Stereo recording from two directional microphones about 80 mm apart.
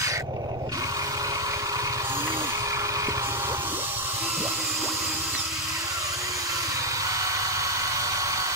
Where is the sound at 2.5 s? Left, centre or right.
Right.